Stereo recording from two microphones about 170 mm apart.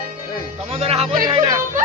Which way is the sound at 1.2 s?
20° right (ahead or behind).